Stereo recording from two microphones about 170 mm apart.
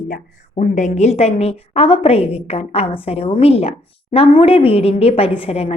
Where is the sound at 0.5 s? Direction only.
45° left (ahead or behind).